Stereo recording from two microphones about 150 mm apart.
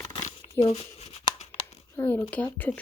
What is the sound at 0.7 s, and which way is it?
Tearing, 40° left (ahead or behind).